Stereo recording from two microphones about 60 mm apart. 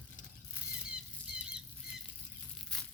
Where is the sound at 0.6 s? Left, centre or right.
Left.